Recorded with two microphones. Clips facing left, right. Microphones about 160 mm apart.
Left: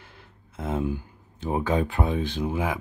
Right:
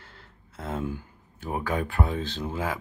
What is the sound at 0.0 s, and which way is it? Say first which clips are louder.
Speech: left 1 dB; 15° left (ahead or behind).